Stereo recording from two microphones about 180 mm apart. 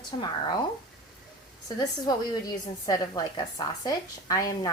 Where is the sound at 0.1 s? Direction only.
30° left (ahead or behind).